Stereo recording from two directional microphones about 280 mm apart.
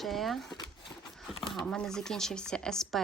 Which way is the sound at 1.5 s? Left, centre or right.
Centre.